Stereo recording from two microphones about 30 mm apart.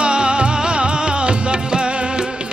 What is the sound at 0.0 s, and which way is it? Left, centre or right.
Music, right.